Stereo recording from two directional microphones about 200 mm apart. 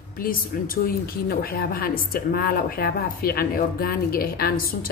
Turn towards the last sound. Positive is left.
turn(degrees=50)  # may be behind; listen again after turning